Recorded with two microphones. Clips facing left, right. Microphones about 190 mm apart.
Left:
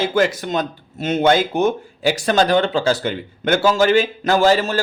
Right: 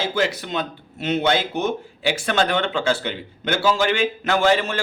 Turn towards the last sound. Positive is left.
turn(degrees=40)  # may be behind; listen again after turning